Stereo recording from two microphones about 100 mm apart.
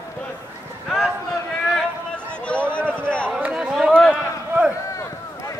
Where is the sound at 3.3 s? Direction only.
10° right (ahead or behind).